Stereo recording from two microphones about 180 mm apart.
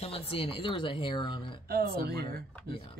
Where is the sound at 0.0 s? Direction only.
30° left (ahead or behind).